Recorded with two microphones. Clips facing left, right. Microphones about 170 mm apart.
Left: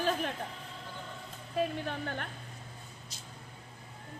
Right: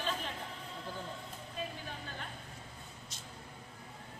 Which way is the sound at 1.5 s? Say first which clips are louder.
Left 11 dB; 65° left (ahead or behind).